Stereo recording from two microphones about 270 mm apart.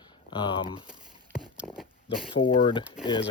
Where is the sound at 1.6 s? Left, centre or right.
Centre.